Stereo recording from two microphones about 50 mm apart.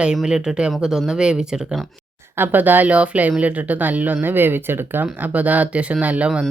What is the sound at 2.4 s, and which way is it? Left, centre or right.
Speech, right.